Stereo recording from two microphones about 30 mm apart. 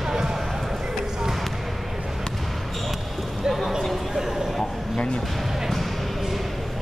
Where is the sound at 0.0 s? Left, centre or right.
Centre.